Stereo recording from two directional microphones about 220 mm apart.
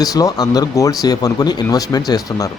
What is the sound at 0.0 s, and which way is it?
Speech, 15° left (ahead or behind).